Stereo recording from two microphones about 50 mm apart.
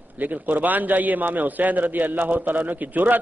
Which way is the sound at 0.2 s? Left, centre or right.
Right.